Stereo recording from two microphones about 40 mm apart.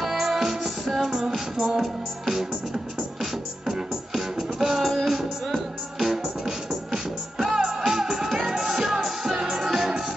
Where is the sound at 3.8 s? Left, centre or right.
Centre.